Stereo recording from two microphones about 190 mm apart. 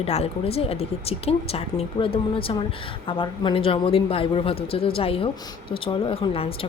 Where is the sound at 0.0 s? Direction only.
35° left (ahead or behind).